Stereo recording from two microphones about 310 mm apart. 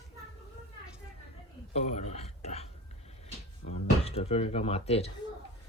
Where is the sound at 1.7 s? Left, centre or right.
Left.